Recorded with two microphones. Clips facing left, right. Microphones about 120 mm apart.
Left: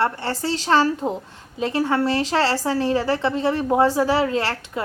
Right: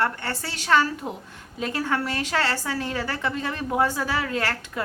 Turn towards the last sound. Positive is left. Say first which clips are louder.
# left 3 dB
turn(degrees=25)  # may be behind; listen again after turning